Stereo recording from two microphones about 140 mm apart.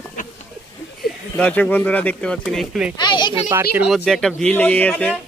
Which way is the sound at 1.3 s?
10° left (ahead or behind).